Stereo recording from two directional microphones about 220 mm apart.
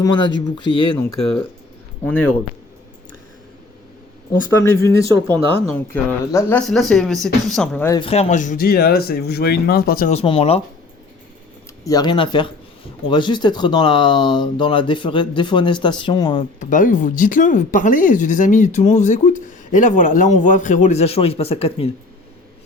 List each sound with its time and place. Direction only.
0.0 s speech: 20° left (ahead or behind)
0.9 s speech: 5° left (ahead or behind)
4.4 s speech: 15° left (ahead or behind)
7.9 s speech: 25° left (ahead or behind)
11.9 s speech: 20° left (ahead or behind)
16.6 s speech: 35° left (ahead or behind)